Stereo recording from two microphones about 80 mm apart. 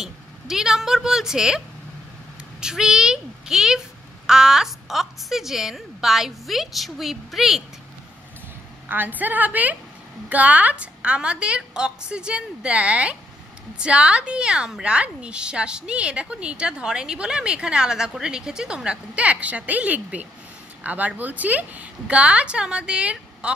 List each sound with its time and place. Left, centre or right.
0.0 s speech: centre
2.6 s a woman's voice: centre
8.8 s a woman's voice: right